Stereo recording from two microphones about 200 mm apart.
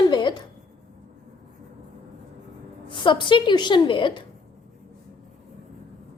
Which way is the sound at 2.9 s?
25° left (ahead or behind).